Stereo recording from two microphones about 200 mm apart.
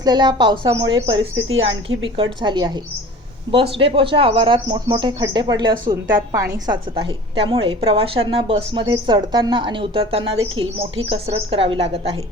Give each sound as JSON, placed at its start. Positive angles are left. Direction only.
{"t": 0.0, "sound": "a woman's voice", "side_deg": -20}
{"t": 1.2, "sound": "a woman's voice", "side_deg": -85}
{"t": 2.0, "sound": "a woman's voice", "side_deg": -25}
{"t": 6.9, "sound": "a woman's voice", "side_deg": -25}